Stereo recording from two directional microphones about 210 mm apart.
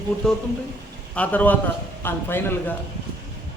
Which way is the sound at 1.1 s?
5° left (ahead or behind).